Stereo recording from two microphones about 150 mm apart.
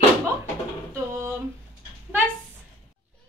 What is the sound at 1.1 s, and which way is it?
Speech, 20° right (ahead or behind).